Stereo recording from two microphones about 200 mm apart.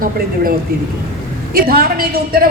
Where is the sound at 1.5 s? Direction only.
45° right (ahead or behind).